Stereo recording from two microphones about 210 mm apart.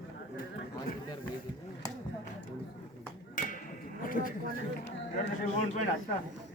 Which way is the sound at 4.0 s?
40° left (ahead or behind).